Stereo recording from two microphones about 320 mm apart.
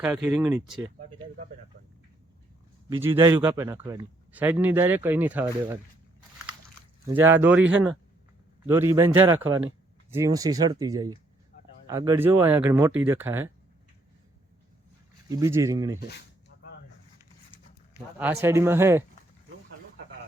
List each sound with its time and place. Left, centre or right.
0.0 s speech: centre
0.9 s speech: right
2.9 s a man's voice: centre
7.3 s a man's voice: centre
15.3 s a man's voice: centre
17.5 s a sound: centre
17.9 s a man's voice: centre